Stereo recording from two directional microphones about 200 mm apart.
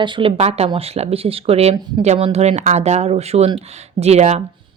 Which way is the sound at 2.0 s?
30° right (ahead or behind).